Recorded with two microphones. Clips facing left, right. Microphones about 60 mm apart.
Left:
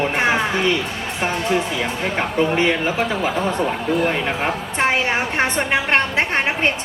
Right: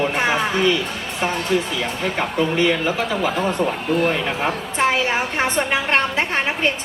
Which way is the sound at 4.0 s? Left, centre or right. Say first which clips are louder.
Right 1 dB; left.